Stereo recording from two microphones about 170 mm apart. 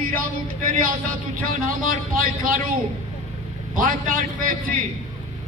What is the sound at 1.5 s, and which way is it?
Speech, 55° right (ahead or behind).